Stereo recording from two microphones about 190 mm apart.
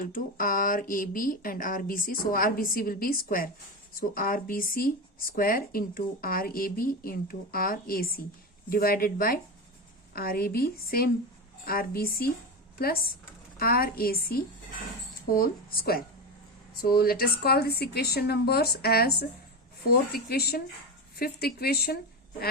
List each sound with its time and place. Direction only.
0.1 s a woman's voice: 45° left (ahead or behind)